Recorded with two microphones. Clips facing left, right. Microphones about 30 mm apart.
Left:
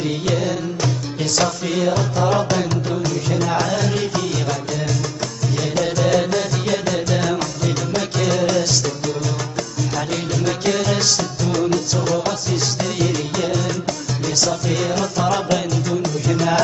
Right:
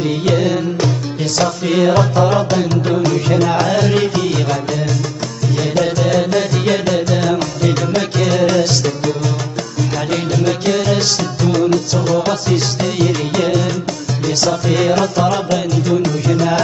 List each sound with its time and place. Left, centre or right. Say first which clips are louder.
0.2 s music: right 6 dB; right
2.2 s music: right 4 dB; centre
2.9 s music: right 7 dB; right
3.4 s music: right 5 dB; right
5.6 s music: right 4 dB; centre
6.3 s music: right 5 dB; right
7.1 s music: right 4 dB; centre
7.6 s music: right 7 dB; right
10.6 s music: right 4 dB; centre
11.0 s music: right 3 dB; right
13.4 s music: right 6 dB; right
15.2 s music: right 3 dB; centre